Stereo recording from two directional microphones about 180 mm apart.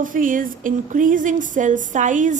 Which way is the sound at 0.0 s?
50° right (ahead or behind).